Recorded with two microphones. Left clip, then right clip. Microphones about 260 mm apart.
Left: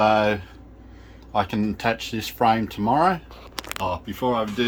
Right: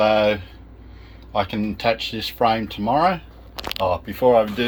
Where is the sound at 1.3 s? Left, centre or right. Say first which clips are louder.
Right 1 dB; left.